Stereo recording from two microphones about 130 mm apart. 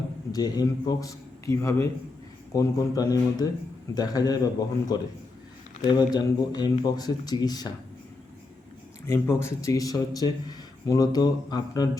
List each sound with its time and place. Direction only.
0.3 s a man's voice: 30° left (ahead or behind)
9.0 s speech: 20° left (ahead or behind)